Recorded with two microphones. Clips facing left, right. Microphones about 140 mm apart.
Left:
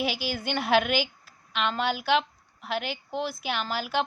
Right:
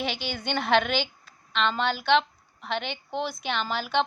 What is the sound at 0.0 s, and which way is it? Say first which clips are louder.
A woman's voice: left 2 dB; 5° left (ahead or behind).